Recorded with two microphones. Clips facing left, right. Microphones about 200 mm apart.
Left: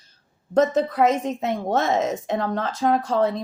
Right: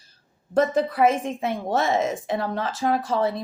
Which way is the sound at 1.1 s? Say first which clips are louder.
Left 2 dB; 10° right (ahead or behind).